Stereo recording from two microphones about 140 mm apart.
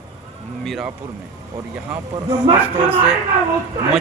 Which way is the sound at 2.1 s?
30° right (ahead or behind).